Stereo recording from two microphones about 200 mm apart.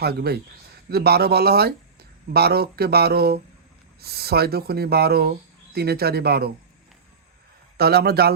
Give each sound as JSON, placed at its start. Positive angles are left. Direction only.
{"t": 0.0, "sound": "speech", "side_deg": -50}
{"t": 7.8, "sound": "speech", "side_deg": -50}